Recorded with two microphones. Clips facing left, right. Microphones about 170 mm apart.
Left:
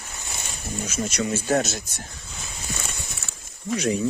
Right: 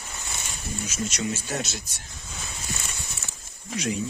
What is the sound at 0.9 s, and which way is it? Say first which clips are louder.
Speech: left 4 dB; 55° left (ahead or behind).